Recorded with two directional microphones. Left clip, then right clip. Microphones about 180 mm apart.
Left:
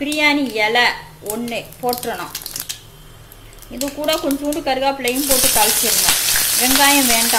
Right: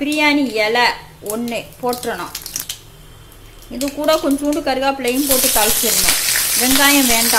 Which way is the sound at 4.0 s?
15° right (ahead or behind).